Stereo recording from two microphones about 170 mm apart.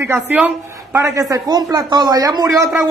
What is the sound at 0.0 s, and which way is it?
Speech, 10° right (ahead or behind).